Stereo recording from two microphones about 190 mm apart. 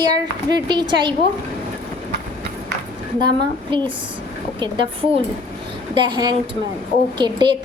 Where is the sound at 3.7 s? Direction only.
25° right (ahead or behind).